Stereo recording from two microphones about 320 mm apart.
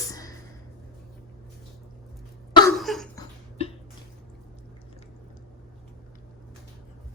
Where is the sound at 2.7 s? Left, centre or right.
Centre.